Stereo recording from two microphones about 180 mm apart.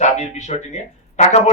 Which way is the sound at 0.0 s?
40° left (ahead or behind).